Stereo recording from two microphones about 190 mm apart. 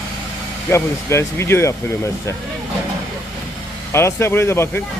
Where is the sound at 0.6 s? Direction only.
15° left (ahead or behind).